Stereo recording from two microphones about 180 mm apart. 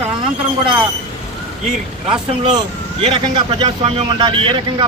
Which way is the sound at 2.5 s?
30° right (ahead or behind).